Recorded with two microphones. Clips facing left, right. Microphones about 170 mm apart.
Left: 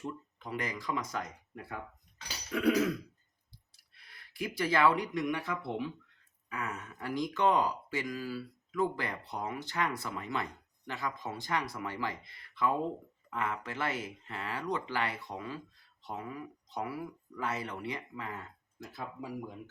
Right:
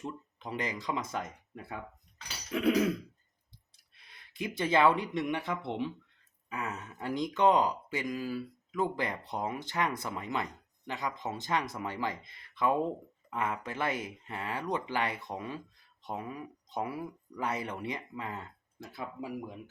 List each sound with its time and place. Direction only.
0.3 s speech: 20° right (ahead or behind)
2.5 s speech: 20° right (ahead or behind)
3.9 s speech: 20° right (ahead or behind)